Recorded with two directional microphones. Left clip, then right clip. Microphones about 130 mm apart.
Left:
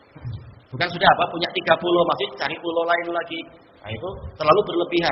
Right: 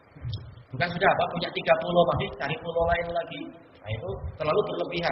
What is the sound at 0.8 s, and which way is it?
A man's voice, 25° left (ahead or behind).